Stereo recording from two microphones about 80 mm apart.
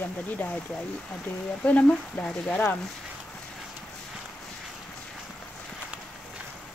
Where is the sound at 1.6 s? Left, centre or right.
Centre.